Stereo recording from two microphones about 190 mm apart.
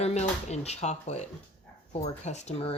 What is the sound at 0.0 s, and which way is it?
Speech, 35° left (ahead or behind).